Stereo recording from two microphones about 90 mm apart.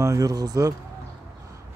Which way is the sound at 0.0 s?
35° right (ahead or behind).